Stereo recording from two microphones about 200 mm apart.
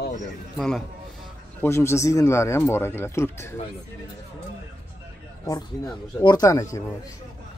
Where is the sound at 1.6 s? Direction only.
15° left (ahead or behind).